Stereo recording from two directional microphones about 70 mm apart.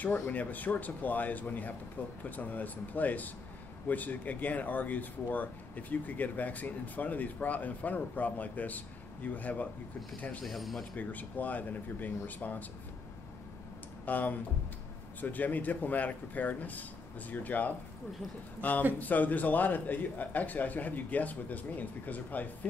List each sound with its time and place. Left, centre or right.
0.3 s speech: left
10.4 s speech: centre
11.0 s speech: left
14.0 s speech: left